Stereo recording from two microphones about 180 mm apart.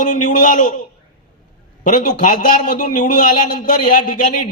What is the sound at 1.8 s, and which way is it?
A man's voice, 45° left (ahead or behind).